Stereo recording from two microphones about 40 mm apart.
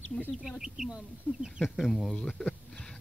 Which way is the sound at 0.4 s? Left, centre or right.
Centre.